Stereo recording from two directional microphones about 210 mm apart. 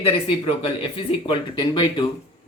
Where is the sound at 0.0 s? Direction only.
30° left (ahead or behind).